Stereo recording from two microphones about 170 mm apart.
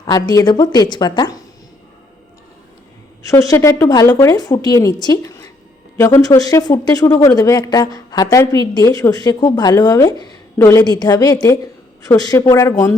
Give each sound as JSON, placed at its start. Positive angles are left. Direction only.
{"t": 0.0, "sound": "speech", "side_deg": 20}
{"t": 3.2, "sound": "speech", "side_deg": 20}